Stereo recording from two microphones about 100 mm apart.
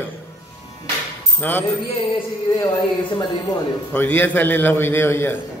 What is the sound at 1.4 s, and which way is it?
Speech, 20° left (ahead or behind).